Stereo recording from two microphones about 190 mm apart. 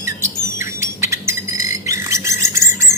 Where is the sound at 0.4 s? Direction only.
15° right (ahead or behind).